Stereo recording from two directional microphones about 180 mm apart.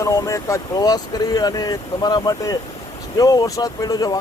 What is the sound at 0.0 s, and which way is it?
Speech, 15° left (ahead or behind).